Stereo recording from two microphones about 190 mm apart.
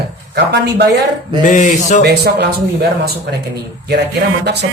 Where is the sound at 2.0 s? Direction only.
60° right (ahead or behind).